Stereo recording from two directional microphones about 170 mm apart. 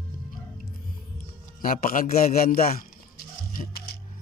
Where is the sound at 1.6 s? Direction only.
55° left (ahead or behind).